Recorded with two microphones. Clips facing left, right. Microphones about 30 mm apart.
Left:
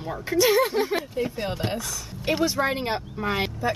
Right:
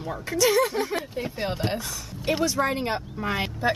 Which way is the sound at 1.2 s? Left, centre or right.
Centre.